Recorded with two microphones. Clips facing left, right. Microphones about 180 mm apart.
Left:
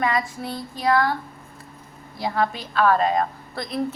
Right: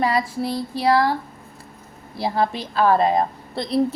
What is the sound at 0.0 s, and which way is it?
A woman's voice, 35° right (ahead or behind).